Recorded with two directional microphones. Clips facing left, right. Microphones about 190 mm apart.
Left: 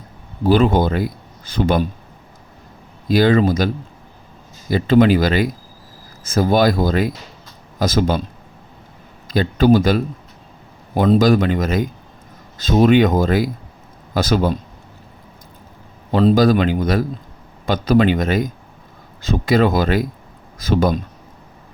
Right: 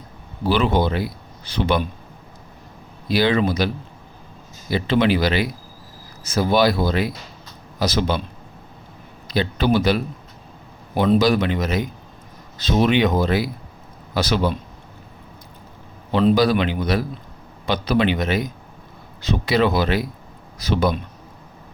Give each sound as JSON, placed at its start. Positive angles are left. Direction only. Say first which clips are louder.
{"t": 0.4, "sound": "a man's voice", "louder": "left 4 dB", "side_deg": 45}
{"t": 3.1, "sound": "a man's voice", "louder": "left 4 dB", "side_deg": 45}
{"t": 4.7, "sound": "a man's voice", "louder": "left 5 dB", "side_deg": 45}
{"t": 9.3, "sound": "a man's voice", "louder": "left 5 dB", "side_deg": 45}
{"t": 16.1, "sound": "a man's voice", "louder": "left 3 dB", "side_deg": 45}